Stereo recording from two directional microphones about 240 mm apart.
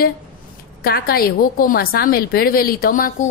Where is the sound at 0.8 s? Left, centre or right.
Left.